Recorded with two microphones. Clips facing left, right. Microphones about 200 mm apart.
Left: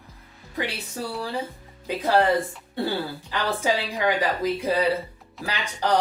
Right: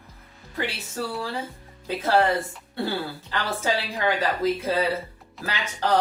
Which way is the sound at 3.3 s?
15° left (ahead or behind).